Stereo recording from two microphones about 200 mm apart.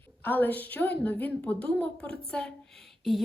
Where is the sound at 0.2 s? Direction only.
10° left (ahead or behind).